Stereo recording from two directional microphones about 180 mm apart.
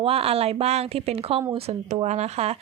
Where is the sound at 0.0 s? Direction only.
35° right (ahead or behind).